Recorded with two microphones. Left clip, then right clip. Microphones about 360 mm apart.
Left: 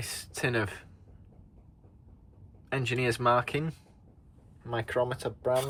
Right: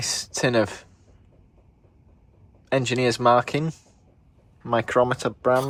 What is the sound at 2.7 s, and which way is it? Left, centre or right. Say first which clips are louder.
Speech: right 8 dB; centre.